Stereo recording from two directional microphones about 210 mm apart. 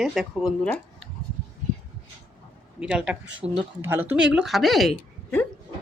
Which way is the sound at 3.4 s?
30° right (ahead or behind).